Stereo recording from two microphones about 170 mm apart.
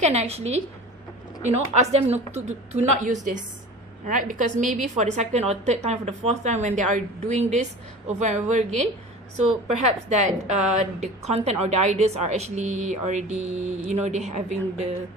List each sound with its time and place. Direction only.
0.0 s a woman's voice: 40° right (ahead or behind)